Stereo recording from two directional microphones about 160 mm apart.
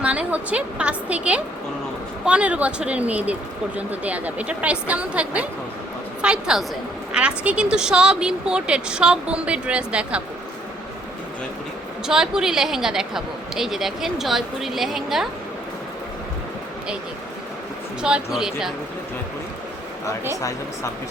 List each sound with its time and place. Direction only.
0.0 s a woman's voice: 5° right (ahead or behind)
12.0 s a woman's voice: 5° right (ahead or behind)
18.0 s a woman's voice: 5° right (ahead or behind)
20.3 s speech: 20° left (ahead or behind)